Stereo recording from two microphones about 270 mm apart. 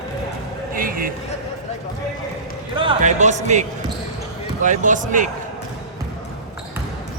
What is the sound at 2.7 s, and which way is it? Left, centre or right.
Speech, right.